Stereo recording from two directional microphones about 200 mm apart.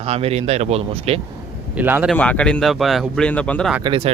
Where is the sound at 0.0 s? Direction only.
30° right (ahead or behind).